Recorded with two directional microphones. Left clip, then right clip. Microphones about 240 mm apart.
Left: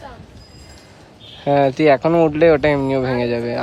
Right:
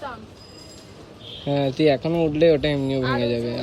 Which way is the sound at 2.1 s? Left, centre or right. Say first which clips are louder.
Left 7 dB; left.